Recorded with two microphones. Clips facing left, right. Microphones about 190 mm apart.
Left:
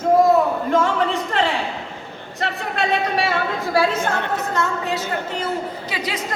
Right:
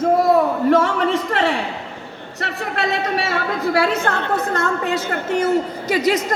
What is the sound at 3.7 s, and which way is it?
A woman's voice, 65° right (ahead or behind).